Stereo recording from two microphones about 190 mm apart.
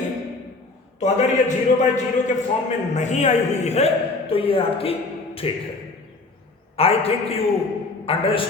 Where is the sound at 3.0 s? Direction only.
40° left (ahead or behind).